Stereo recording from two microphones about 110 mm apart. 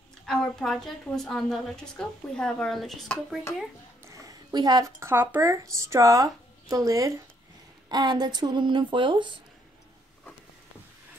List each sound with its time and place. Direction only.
0.2 s a woman's voice: 5° left (ahead or behind)
4.0 s a sound: 30° right (ahead or behind)
4.8 s speech: 20° right (ahead or behind); by 9.4 s 45° right (ahead or behind)